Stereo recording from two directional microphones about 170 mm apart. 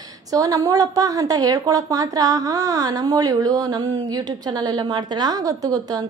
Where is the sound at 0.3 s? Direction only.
20° right (ahead or behind).